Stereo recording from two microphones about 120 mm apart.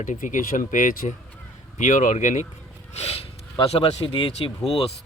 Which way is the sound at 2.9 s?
60° left (ahead or behind).